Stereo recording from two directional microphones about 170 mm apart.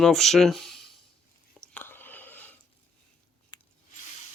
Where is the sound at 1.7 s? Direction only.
10° left (ahead or behind).